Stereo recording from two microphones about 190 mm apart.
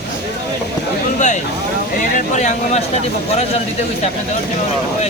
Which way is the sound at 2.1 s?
40° left (ahead or behind).